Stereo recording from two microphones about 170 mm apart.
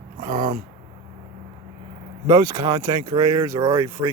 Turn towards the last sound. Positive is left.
turn(degrees=-15)  # may be behind; listen again after turning